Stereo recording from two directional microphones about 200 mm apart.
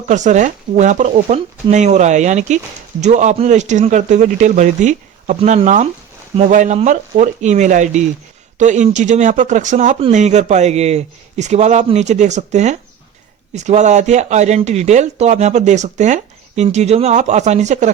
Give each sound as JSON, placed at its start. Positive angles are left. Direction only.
{"t": 0.1, "sound": "speech", "side_deg": -40}